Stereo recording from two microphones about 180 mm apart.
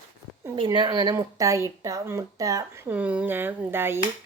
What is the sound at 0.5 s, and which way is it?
Speech, 25° right (ahead or behind).